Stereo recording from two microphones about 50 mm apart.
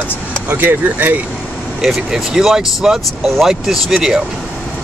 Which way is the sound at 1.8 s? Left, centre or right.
Centre.